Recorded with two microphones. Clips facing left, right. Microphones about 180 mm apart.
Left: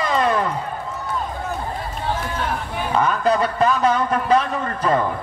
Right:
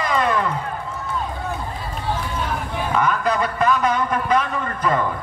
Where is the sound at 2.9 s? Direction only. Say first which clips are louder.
Left 2 dB; 30° left (ahead or behind).